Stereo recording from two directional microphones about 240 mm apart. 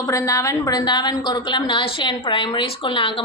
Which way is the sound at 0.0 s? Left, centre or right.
Centre.